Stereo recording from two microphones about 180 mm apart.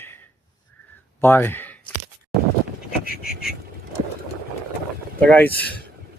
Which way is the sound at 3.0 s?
55° left (ahead or behind).